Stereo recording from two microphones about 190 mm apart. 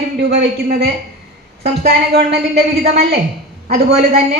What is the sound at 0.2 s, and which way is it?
A woman's voice, 55° right (ahead or behind).